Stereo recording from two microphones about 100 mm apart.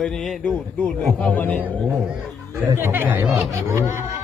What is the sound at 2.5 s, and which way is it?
Speech, 25° right (ahead or behind).